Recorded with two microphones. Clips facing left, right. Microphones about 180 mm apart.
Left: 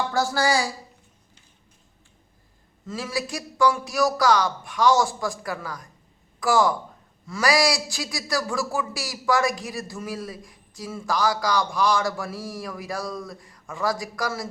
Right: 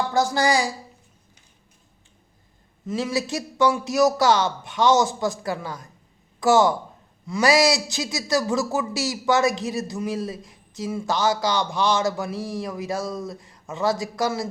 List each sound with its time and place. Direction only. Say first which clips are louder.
0.1 s speech: right 3 dB; 20° right (ahead or behind)
2.8 s speech: right 5 dB; 20° right (ahead or behind)